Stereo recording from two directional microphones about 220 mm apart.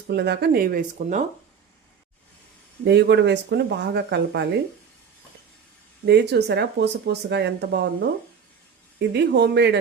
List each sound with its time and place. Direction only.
0.1 s speech: 50° right (ahead or behind)
2.8 s speech: 50° right (ahead or behind)
6.1 s speech: 50° right (ahead or behind)
9.0 s speech: 50° right (ahead or behind)